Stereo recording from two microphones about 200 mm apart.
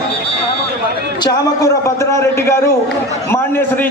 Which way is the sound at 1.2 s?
20° left (ahead or behind).